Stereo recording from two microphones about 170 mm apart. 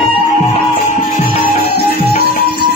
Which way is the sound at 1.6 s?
65° left (ahead or behind).